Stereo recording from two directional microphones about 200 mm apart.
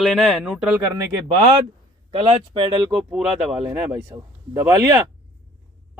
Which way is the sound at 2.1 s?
25° right (ahead or behind).